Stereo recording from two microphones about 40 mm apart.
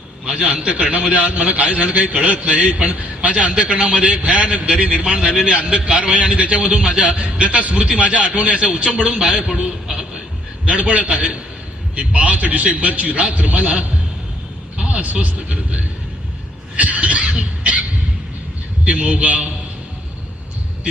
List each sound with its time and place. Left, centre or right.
0.3 s a man's voice: right
4.7 s a man's voice: centre
6.7 s a man's voice: right
9.8 s music: centre
10.8 s a man's voice: right
15.0 s speech: right
16.7 s a sound: right
18.9 s a man's voice: right